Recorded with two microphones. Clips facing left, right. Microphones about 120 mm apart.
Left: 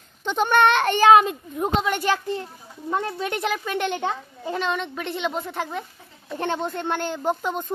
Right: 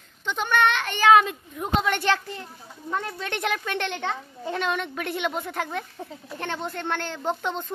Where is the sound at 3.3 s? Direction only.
5° left (ahead or behind).